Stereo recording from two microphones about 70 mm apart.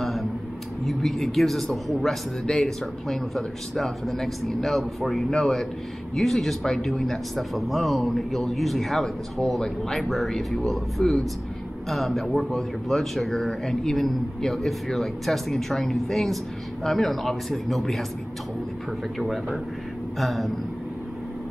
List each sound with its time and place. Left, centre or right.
0.0 s a sound: centre
0.8 s speech: centre
19.1 s speech: centre